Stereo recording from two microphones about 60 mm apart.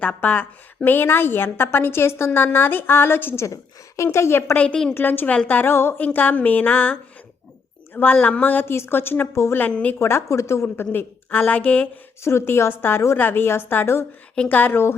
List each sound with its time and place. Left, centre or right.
0.0 s a woman's voice: left
3.3 s a woman's voice: left
4.5 s a woman's voice: left
4.9 s a woman's voice: left
5.6 s a woman's voice: left
6.0 s a woman's voice: left
8.1 s a woman's voice: left
8.6 s a woman's voice: left
9.3 s a woman's voice: left
9.6 s a woman's voice: left
10.0 s a woman's voice: left
10.8 s a woman's voice: left
12.2 s a woman's voice: left
13.1 s a woman's voice: left